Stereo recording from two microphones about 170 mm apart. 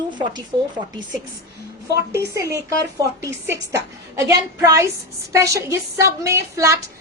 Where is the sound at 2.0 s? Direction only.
15° right (ahead or behind).